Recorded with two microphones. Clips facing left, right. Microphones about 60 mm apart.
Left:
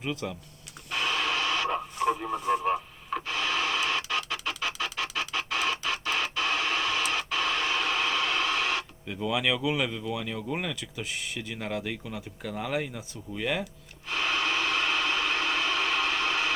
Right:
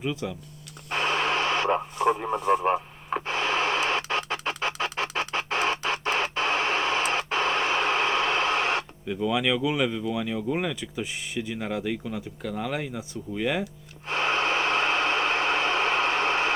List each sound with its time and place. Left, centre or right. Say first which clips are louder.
0.0 s speech: right 3 dB; centre
0.9 s radio: right 3 dB; right
4.3 s chicken: right 3 dB; right
5.1 s music: right 3 dB; right
9.0 s speech: right 3 dB; centre
11.9 s speech: right 5 dB; centre
14.1 s vehicle: right 3 dB; right